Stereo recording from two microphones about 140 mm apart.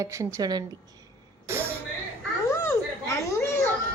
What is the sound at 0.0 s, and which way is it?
Speech, 20° right (ahead or behind).